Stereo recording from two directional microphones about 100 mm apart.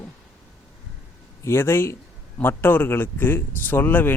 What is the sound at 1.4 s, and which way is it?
Speech, 25° left (ahead or behind).